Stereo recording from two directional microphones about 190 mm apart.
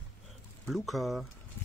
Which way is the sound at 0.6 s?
Centre (ahead or behind).